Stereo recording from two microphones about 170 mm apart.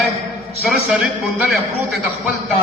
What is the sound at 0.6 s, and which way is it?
A man's voice, 5° right (ahead or behind).